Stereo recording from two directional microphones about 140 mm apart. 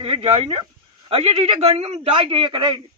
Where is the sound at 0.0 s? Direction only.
40° right (ahead or behind).